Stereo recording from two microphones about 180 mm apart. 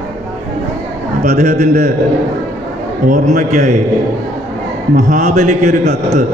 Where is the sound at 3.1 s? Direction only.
40° right (ahead or behind).